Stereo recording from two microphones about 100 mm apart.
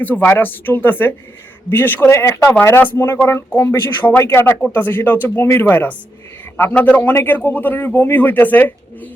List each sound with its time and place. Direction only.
0.0 s a man's voice: 20° left (ahead or behind)